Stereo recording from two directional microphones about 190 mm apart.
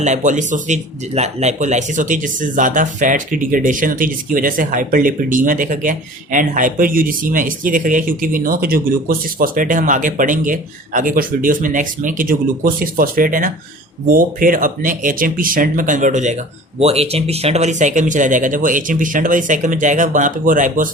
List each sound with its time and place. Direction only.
0.0 s speech: 40° right (ahead or behind)